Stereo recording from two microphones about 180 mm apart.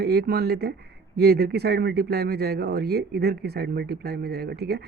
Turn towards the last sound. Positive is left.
turn(degrees=-65)  # may be behind; listen again after turning